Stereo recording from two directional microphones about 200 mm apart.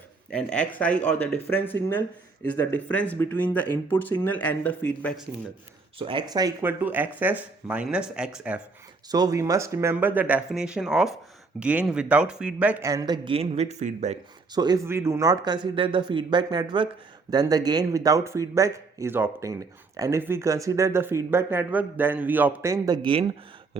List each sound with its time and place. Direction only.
0.3 s speech: 5° left (ahead or behind)
6.0 s a man's voice: 25° right (ahead or behind); by 8.6 s 5° right (ahead or behind)
9.0 s a man's voice: 20° right (ahead or behind); by 14.2 s 35° right (ahead or behind)
14.5 s a man's voice: 20° right (ahead or behind)
23.0 s speech: 25° right (ahead or behind)